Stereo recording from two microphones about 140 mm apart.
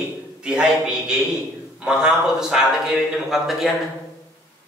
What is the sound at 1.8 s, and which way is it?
A man's voice, 5° right (ahead or behind).